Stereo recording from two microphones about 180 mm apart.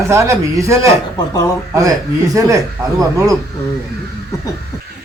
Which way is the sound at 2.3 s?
20° right (ahead or behind).